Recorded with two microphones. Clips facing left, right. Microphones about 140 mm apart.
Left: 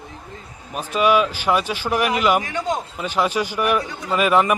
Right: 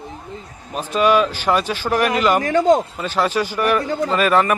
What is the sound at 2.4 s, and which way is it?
Speech, 50° right (ahead or behind).